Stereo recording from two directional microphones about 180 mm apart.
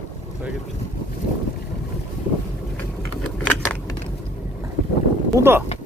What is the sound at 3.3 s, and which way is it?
Keys jangling, 5° left (ahead or behind).